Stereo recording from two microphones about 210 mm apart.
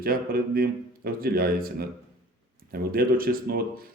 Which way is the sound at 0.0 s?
45° right (ahead or behind).